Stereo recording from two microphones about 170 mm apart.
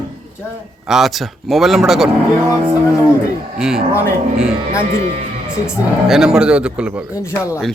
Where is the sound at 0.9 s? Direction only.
Centre (ahead or behind).